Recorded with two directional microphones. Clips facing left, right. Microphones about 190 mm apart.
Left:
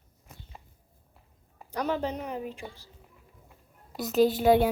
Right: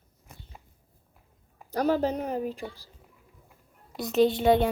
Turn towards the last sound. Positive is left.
turn(degrees=5)  # may be behind; listen again after turning